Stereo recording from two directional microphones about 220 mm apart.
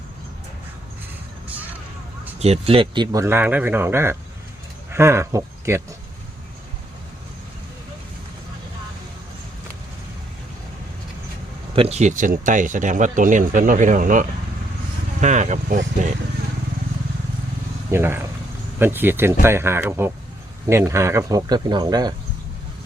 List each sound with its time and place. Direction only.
2.4 s speech: 25° right (ahead or behind); by 5.8 s 10° right (ahead or behind)
11.7 s speech: 25° right (ahead or behind)
17.9 s speech: 10° right (ahead or behind)